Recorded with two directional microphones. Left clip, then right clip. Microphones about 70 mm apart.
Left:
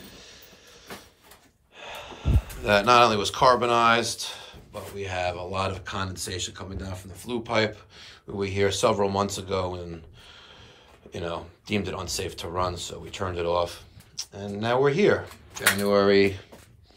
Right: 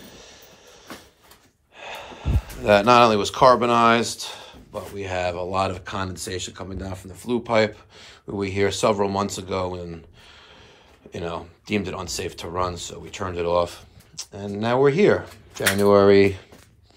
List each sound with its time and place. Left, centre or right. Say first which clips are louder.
0.0 s vehicle: right 2 dB; centre
1.8 s speech: right 3 dB; left; by 8.5 s centre
8.5 s speech: right 2 dB; left
11.1 s speech: right 2 dB; left
13.6 s speech: right 4 dB; left
15.5 s speech: right 5 dB; centre
16.2 s speech: right 4 dB; left